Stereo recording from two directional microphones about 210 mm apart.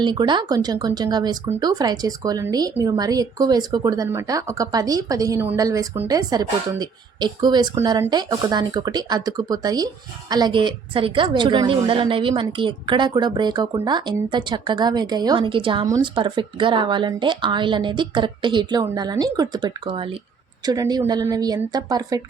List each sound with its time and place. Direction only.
0.0 s speech: 20° right (ahead or behind)